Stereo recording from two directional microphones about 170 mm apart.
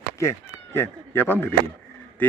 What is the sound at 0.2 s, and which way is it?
Speech, 15° left (ahead or behind).